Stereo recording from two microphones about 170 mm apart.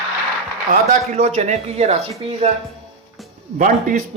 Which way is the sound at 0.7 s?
45° right (ahead or behind).